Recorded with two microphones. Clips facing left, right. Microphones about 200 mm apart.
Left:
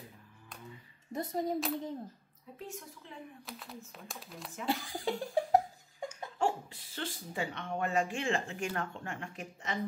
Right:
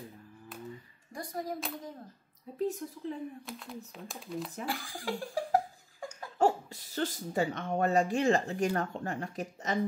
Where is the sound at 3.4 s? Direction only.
Centre (ahead or behind).